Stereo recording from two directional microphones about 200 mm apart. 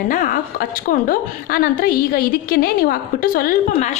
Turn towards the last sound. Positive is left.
turn(degrees=45)  # may be behind; listen again after turning